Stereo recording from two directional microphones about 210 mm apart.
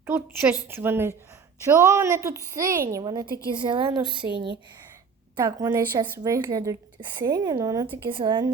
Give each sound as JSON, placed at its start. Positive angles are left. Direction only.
{"t": 0.0, "sound": "a woman's voice", "side_deg": -10}
{"t": 5.4, "sound": "a woman's voice", "side_deg": -15}